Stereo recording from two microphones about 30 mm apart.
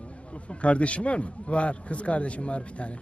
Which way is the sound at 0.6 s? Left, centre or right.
Left.